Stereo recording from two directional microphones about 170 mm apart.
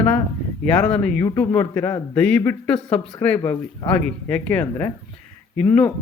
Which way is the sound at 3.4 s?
20° left (ahead or behind).